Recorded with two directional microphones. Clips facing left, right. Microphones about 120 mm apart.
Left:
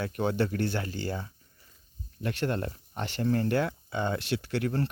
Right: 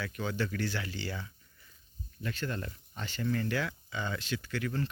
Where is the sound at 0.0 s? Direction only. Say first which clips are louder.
Left 6 dB; 55° left (ahead or behind).